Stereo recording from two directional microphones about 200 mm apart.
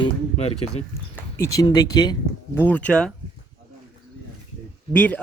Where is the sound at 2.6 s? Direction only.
5° left (ahead or behind).